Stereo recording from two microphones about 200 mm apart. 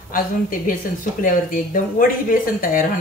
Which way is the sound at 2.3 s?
45° left (ahead or behind).